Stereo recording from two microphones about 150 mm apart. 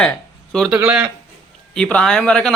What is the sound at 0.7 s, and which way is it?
Speech, 10° right (ahead or behind).